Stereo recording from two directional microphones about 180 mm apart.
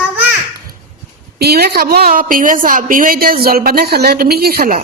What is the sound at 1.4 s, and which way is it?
A woman's voice, 60° right (ahead or behind).